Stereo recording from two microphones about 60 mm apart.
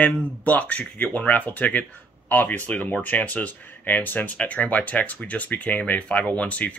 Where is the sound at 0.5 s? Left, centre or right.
Left.